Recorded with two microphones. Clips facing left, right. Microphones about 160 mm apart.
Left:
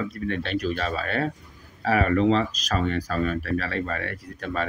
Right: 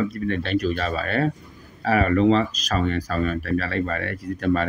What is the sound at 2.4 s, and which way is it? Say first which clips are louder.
Speech: right 2 dB; centre (ahead or behind).